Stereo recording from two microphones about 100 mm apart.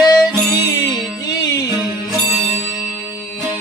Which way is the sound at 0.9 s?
40° left (ahead or behind).